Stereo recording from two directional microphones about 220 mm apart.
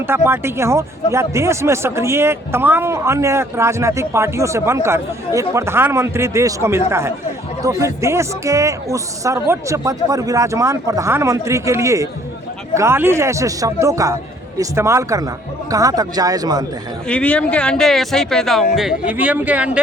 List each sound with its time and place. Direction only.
0.1 s speech: 10° right (ahead or behind)
17.1 s speech: 5° left (ahead or behind)